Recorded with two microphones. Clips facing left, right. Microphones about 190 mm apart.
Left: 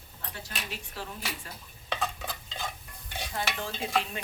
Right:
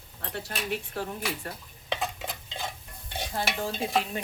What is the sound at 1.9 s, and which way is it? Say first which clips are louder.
Stir: right 1 dB; 20° right (ahead or behind).